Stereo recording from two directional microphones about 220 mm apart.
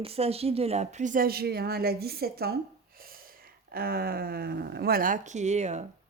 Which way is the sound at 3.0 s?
40° right (ahead or behind).